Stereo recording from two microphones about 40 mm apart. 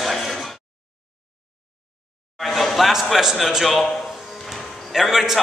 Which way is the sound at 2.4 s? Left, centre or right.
Centre.